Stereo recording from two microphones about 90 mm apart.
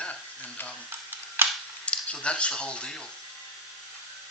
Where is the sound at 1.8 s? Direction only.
15° left (ahead or behind).